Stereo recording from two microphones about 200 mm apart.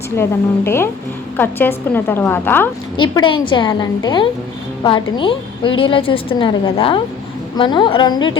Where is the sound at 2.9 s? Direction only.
25° left (ahead or behind).